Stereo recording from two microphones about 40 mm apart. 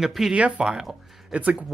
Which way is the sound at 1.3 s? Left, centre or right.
Right.